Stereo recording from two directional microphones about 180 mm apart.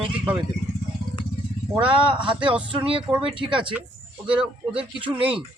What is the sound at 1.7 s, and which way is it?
Speech, 5° right (ahead or behind).